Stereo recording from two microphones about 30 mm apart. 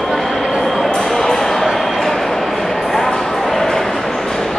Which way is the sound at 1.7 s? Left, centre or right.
Centre.